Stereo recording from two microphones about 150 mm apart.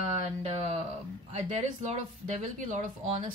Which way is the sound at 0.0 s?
45° right (ahead or behind).